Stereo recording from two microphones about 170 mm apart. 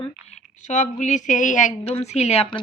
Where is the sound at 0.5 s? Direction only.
45° left (ahead or behind).